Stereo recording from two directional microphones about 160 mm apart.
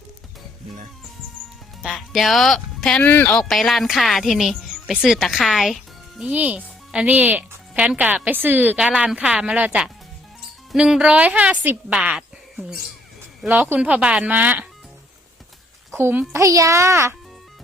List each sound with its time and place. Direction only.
1.8 s speech: centre (ahead or behind)
16.0 s speech: 15° right (ahead or behind)